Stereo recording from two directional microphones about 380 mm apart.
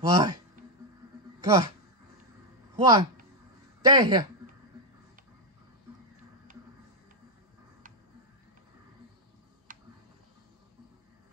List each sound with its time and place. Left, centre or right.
0.1 s speech: centre
1.4 s speech: centre
2.7 s speech: centre
9.7 s a sound: right